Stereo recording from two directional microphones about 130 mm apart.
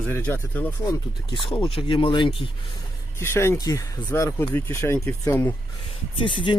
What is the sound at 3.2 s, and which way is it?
Speech, 20° left (ahead or behind).